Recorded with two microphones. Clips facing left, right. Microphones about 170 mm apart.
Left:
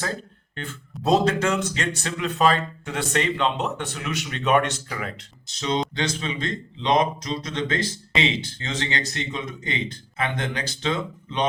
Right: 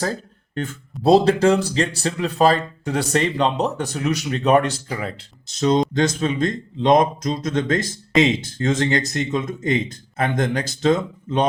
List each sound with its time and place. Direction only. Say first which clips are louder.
0.5 s speech: right 8 dB; 45° right (ahead or behind)
1.0 s speech: right 6 dB; 35° right (ahead or behind)
5.5 s speech: right 7 dB; 45° right (ahead or behind)